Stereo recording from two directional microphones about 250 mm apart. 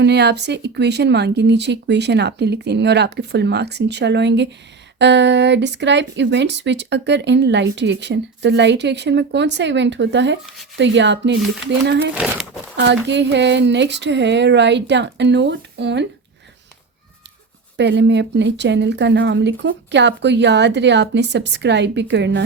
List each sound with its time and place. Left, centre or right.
0.0 s speech: right
12.1 s speech: centre
12.7 s speech: right
17.7 s speech: right